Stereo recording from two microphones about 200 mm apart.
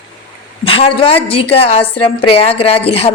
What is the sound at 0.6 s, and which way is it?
A woman's voice, 30° left (ahead or behind).